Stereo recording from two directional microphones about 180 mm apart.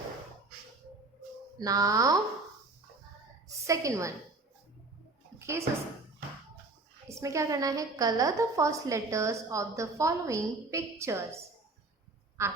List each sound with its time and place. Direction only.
1.5 s speech: 20° right (ahead or behind)
3.7 s a woman's voice: 15° right (ahead or behind)
5.4 s a sound: 15° right (ahead or behind)
7.1 s a woman's voice: 15° right (ahead or behind)
12.4 s quack: 15° right (ahead or behind)